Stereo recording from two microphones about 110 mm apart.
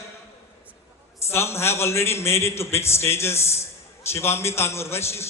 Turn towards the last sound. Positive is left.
turn(degrees=25)  # may be behind; listen again after turning